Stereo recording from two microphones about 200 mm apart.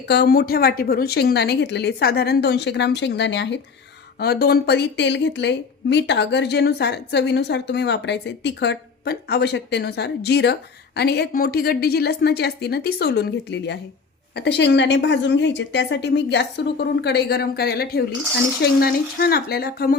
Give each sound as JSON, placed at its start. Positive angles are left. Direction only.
{"t": 0.1, "sound": "a woman's voice", "side_deg": 55}